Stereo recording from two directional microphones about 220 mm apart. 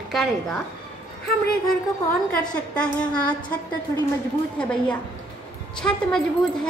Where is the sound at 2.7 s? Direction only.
5° left (ahead or behind).